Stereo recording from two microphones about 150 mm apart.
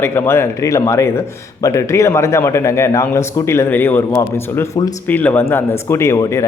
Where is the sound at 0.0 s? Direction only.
15° left (ahead or behind).